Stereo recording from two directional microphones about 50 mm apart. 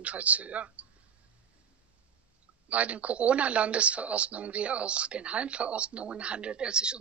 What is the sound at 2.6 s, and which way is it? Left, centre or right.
Speech, right.